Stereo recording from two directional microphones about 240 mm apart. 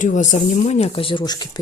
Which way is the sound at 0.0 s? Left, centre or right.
Left.